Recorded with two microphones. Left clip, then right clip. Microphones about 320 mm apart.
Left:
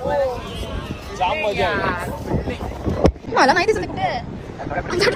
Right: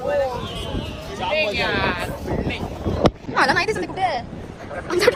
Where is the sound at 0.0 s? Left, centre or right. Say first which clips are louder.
Left 1 dB; centre.